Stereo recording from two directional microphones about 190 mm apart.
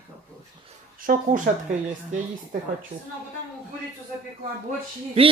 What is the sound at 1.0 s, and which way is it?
Speech, 45° right (ahead or behind).